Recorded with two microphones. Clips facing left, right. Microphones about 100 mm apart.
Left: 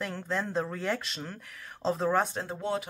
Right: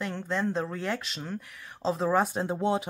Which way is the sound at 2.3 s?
20° right (ahead or behind).